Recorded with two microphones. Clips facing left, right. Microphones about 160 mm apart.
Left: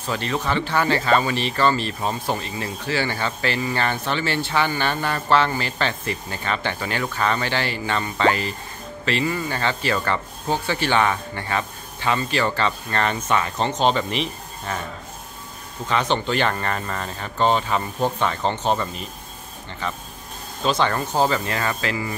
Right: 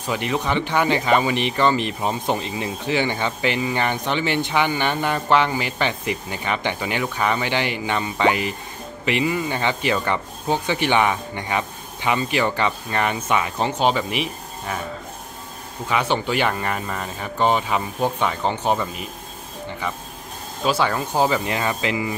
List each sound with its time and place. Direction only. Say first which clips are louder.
0.0 s speech: right 2 dB; 15° right (ahead or behind)
15.9 s speech: even; 10° right (ahead or behind)
20.6 s speech: even; 10° right (ahead or behind)